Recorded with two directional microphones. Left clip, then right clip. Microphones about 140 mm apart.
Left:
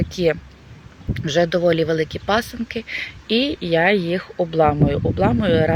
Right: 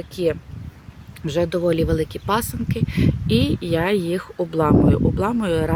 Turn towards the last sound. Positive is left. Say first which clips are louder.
# left 4 dB
turn(degrees=-35)  # may be behind; listen again after turning